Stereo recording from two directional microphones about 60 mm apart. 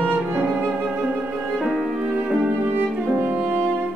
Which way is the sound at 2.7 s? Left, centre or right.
Right.